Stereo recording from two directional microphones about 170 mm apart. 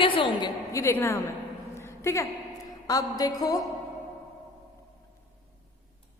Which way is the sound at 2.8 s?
20° left (ahead or behind).